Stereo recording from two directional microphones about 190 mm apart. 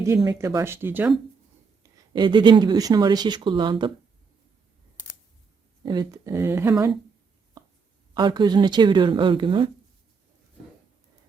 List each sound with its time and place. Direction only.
0.3 s speech: 20° right (ahead or behind)
1.8 s speech: 25° right (ahead or behind)
5.8 s speech: 20° right (ahead or behind)
8.1 s speech: 25° right (ahead or behind)